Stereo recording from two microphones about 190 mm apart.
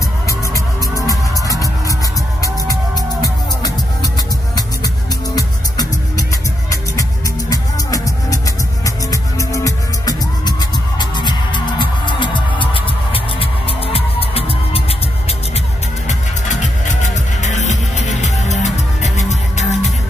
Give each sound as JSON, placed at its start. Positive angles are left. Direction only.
{"t": 0.3, "sound": "music", "side_deg": 15}
{"t": 3.2, "sound": "music", "side_deg": 20}
{"t": 16.1, "sound": "music", "side_deg": 40}